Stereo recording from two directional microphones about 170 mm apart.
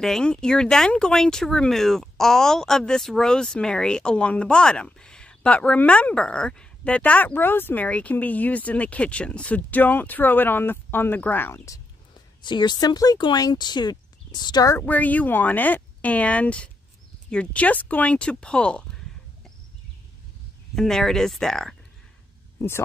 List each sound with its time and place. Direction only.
0.0 s speech: 5° left (ahead or behind)
20.7 s speech: 5° left (ahead or behind)